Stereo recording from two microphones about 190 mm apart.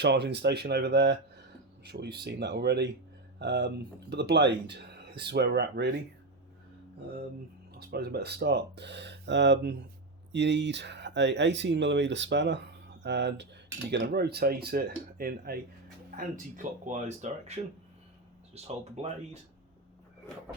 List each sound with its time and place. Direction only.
0.0 s speech: 60° right (ahead or behind)
2.2 s speech: 65° right (ahead or behind)
7.7 s speech: 55° right (ahead or behind); by 17.6 s 35° right (ahead or behind)